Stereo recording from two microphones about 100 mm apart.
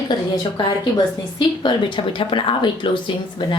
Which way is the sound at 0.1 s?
50° left (ahead or behind).